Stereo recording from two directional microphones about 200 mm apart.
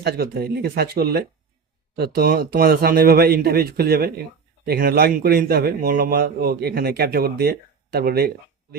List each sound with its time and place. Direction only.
0.0 s speech: 50° right (ahead or behind)